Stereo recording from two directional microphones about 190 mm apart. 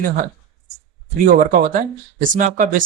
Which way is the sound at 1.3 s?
45° right (ahead or behind).